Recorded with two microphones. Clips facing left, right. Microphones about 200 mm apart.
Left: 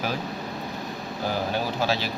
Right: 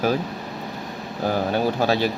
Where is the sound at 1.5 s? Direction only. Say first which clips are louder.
Right 5 dB; 55° right (ahead or behind).